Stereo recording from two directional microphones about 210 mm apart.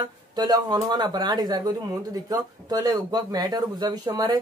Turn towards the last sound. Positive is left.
turn(degrees=-20)  # may be behind; listen again after turning